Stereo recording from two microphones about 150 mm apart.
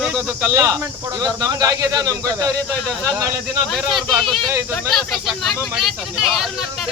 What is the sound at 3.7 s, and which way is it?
Speech, centre (ahead or behind).